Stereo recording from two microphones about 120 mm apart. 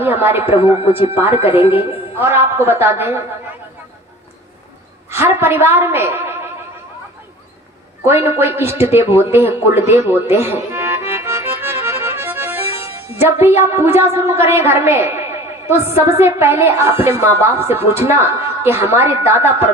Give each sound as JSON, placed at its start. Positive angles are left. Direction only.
{"t": 0.0, "sound": "a man's voice", "side_deg": -15}
{"t": 0.6, "sound": "a man's voice", "side_deg": 55}
{"t": 1.1, "sound": "speech", "side_deg": -20}
{"t": 1.6, "sound": "a woman's voice", "side_deg": 50}
{"t": 2.1, "sound": "a woman's voice", "side_deg": -20}
{"t": 5.1, "sound": "a woman's voice", "side_deg": -20}
{"t": 8.0, "sound": "a woman's voice", "side_deg": -20}